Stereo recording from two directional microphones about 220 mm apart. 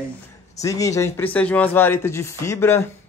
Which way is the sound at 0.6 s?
15° left (ahead or behind).